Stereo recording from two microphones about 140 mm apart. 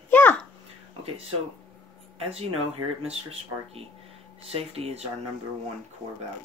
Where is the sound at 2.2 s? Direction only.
45° right (ahead or behind).